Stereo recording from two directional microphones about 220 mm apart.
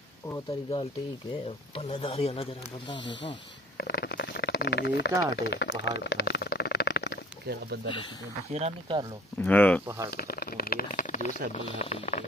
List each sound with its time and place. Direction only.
1.8 s speech: 25° left (ahead or behind)
3.3 s a sound: 45° left (ahead or behind)
8.5 s speech: 25° right (ahead or behind)
9.4 s speech: 10° left (ahead or behind)
10.1 s speech: 45° left (ahead or behind)